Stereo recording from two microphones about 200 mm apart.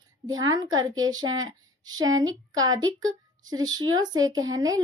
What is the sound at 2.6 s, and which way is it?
Child singing, 20° right (ahead or behind).